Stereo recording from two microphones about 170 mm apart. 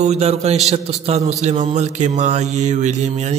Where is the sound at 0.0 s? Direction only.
40° right (ahead or behind).